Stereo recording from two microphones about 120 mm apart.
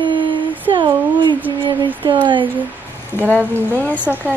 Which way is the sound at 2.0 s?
45° right (ahead or behind).